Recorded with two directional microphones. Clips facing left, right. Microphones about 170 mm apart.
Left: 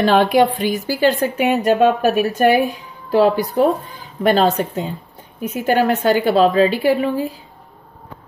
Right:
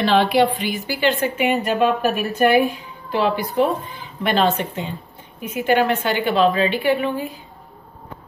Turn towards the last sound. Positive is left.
turn(degrees=35)  # may be behind; listen again after turning